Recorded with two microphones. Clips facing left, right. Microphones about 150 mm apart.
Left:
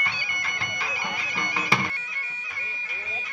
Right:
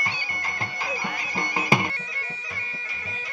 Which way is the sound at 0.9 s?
40° right (ahead or behind).